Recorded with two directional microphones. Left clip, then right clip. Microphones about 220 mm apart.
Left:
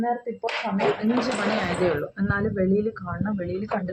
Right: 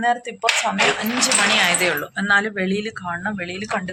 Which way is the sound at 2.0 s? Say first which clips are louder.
Right 9 dB; 20° right (ahead or behind).